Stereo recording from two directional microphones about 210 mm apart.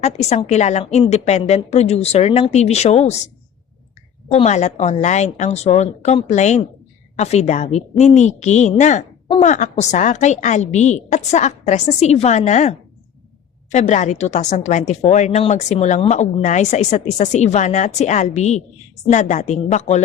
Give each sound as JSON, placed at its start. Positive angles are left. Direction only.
{"t": 0.0, "sound": "a woman's voice", "side_deg": 30}
{"t": 4.3, "sound": "a woman's voice", "side_deg": 30}